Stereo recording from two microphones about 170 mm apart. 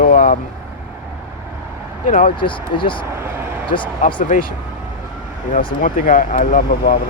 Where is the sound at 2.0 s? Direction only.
50° left (ahead or behind).